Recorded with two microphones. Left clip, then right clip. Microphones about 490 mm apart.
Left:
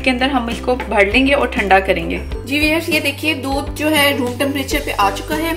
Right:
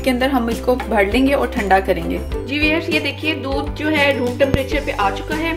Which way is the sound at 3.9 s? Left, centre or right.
Right.